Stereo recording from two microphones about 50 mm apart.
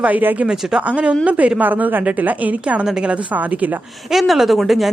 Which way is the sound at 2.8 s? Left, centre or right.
Centre.